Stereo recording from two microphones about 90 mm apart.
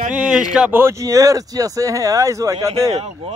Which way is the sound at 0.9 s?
35° right (ahead or behind).